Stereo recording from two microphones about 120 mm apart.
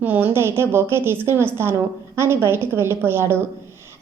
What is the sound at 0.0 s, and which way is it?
A woman's voice, 15° right (ahead or behind).